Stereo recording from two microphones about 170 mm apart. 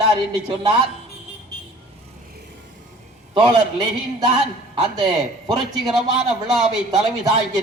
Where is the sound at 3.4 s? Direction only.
25° right (ahead or behind).